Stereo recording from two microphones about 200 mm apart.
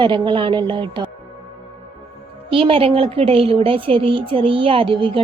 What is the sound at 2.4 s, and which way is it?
A woman's voice, 25° right (ahead or behind).